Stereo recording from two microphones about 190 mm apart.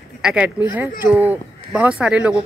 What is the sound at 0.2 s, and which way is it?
Speech, 5° right (ahead or behind).